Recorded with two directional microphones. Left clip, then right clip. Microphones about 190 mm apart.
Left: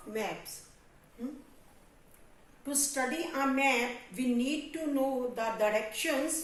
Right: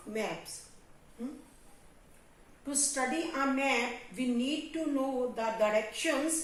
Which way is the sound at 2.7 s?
25° left (ahead or behind).